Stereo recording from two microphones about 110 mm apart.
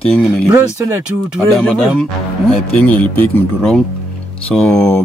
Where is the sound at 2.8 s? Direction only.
15° left (ahead or behind).